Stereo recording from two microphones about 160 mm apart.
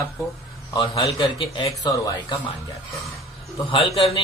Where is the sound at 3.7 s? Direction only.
35° left (ahead or behind).